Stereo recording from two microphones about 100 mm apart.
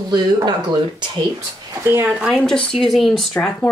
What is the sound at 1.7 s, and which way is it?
Speech, 25° right (ahead or behind).